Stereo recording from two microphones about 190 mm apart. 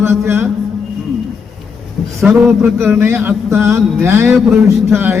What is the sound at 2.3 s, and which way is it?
A man's voice, 10° right (ahead or behind).